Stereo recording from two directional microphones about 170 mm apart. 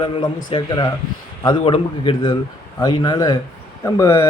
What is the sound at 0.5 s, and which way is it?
Speech, 25° left (ahead or behind).